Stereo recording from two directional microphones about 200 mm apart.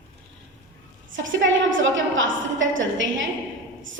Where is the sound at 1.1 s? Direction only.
70° right (ahead or behind).